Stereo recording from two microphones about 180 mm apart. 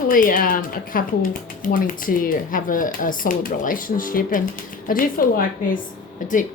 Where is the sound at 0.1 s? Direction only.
50° left (ahead or behind).